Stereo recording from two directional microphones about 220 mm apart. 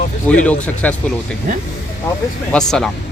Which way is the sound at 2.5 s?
5° left (ahead or behind).